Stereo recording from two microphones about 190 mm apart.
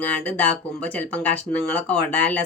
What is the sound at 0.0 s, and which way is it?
Speech, 10° left (ahead or behind).